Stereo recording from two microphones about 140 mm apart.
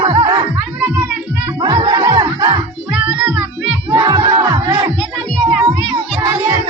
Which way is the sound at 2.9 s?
10° right (ahead or behind).